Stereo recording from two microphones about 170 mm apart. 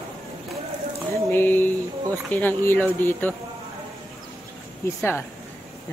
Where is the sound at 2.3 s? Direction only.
10° left (ahead or behind).